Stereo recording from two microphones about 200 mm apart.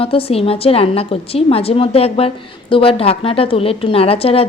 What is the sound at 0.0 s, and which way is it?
A woman's voice, 30° left (ahead or behind).